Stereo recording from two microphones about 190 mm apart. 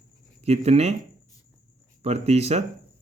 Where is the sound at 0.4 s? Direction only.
35° right (ahead or behind).